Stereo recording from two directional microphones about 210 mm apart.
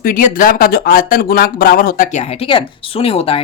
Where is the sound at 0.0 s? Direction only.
40° left (ahead or behind).